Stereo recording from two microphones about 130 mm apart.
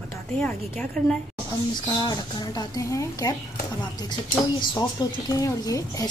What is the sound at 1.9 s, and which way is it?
A woman's voice, 30° left (ahead or behind).